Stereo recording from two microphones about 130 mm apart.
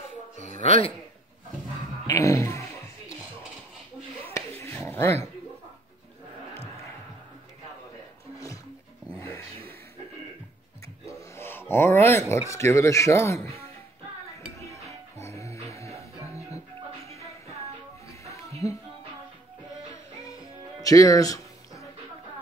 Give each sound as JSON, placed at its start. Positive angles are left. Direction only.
{"t": 0.6, "sound": "a man's voice", "side_deg": 50}
{"t": 2.0, "sound": "music", "side_deg": 20}
{"t": 4.2, "sound": "a sound", "side_deg": 15}
{"t": 9.2, "sound": "a sound", "side_deg": 15}
{"t": 11.1, "sound": "a sound", "side_deg": 20}
{"t": 11.7, "sound": "speech", "side_deg": 20}
{"t": 14.6, "sound": "music", "side_deg": 25}
{"t": 18.3, "sound": "music", "side_deg": 25}
{"t": 20.2, "sound": "music", "side_deg": 25}